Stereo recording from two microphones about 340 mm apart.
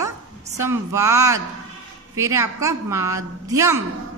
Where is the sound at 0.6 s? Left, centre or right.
Centre.